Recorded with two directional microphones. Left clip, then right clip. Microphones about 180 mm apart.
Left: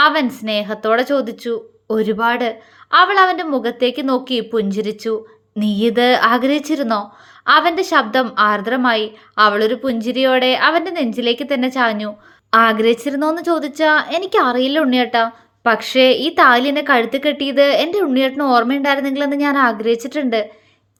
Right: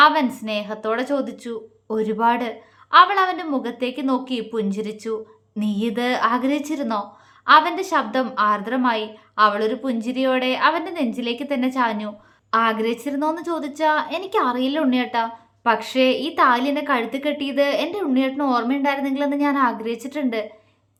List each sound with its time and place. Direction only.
0.0 s a woman's voice: 20° left (ahead or behind)